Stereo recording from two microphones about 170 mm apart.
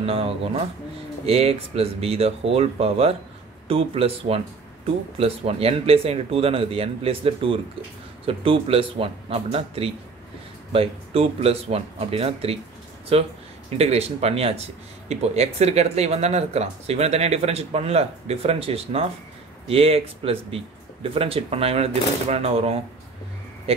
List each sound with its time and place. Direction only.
0.0 s speech: 35° right (ahead or behind)